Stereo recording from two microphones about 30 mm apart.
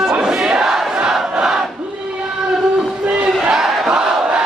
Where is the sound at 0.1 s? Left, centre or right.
Right.